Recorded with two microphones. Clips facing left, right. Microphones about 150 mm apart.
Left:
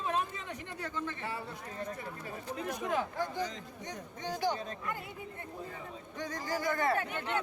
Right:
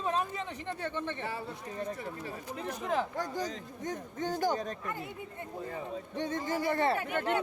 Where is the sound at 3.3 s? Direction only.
45° right (ahead or behind).